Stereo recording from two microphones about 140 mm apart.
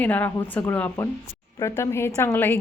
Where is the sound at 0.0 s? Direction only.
10° left (ahead or behind).